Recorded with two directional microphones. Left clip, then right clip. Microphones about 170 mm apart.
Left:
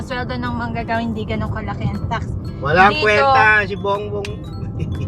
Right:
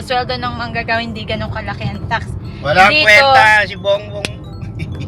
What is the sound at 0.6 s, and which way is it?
Speech, 15° right (ahead or behind).